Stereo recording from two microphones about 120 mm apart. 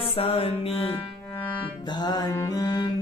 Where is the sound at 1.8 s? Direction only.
35° left (ahead or behind).